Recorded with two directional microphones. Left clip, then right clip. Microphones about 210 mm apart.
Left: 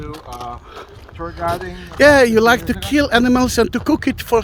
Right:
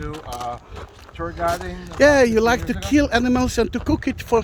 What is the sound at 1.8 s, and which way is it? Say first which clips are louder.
Speech: left 4 dB; 25° left (ahead or behind).